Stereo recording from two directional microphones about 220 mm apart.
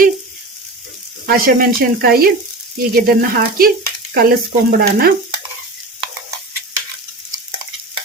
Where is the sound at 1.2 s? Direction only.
40° right (ahead or behind).